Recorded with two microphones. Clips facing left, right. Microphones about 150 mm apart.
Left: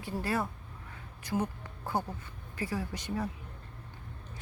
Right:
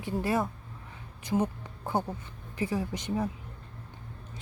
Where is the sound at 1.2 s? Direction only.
20° right (ahead or behind).